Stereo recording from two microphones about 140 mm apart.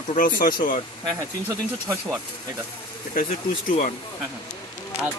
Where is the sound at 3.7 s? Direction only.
55° left (ahead or behind).